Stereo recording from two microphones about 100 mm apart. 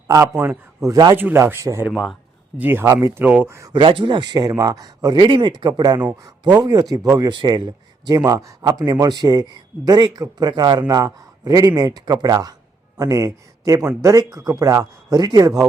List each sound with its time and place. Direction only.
0.4 s speech: 30° right (ahead or behind)
1.1 s speech: 20° right (ahead or behind)
1.9 s speech: 5° right (ahead or behind)
2.6 s speech: 20° right (ahead or behind)
2.8 s speech: 35° right (ahead or behind)
3.2 s speech: 20° right (ahead or behind)
3.7 s speech: 60° right (ahead or behind)
6.7 s speech: 35° right (ahead or behind)
7.3 s speech: 50° right (ahead or behind)